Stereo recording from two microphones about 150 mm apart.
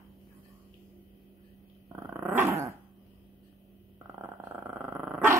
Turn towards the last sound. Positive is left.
turn(degrees=-10)  # may be behind; listen again after turning